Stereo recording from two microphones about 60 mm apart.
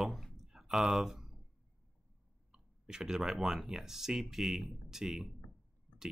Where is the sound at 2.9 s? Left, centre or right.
Centre.